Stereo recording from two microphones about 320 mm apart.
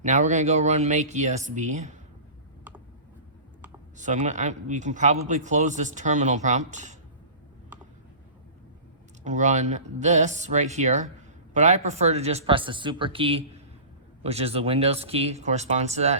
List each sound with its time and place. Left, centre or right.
0.0 s speech: right
3.9 s speech: right
9.2 s speech: right